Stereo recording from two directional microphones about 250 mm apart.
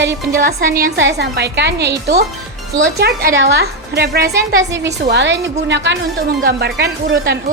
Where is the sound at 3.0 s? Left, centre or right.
Right.